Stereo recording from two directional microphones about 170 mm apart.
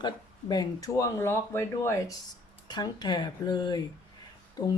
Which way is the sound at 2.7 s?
25° left (ahead or behind).